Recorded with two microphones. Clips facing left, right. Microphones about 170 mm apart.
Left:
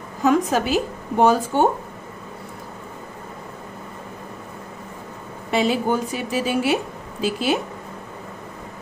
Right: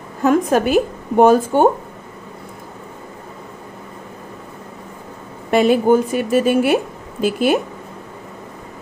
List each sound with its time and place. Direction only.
0.2 s speech: 55° right (ahead or behind)
5.5 s speech: 55° right (ahead or behind)